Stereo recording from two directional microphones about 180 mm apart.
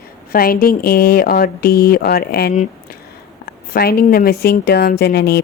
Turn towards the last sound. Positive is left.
turn(degrees=65)  # may be behind; listen again after turning